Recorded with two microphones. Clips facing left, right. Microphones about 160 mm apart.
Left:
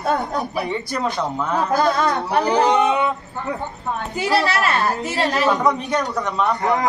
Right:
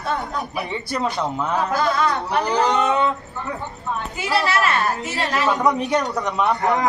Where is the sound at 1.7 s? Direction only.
45° left (ahead or behind).